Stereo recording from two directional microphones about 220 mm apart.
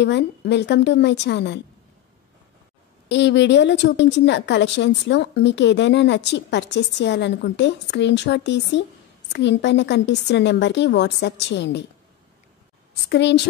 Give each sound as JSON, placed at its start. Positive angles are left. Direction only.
{"t": 0.0, "sound": "a woman's voice", "side_deg": 50}
{"t": 3.1, "sound": "a woman's voice", "side_deg": 55}
{"t": 13.1, "sound": "a woman's voice", "side_deg": 50}